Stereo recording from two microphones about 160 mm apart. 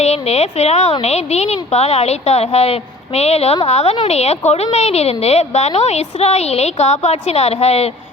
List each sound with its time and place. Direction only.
0.0 s a woman's voice: 40° left (ahead or behind)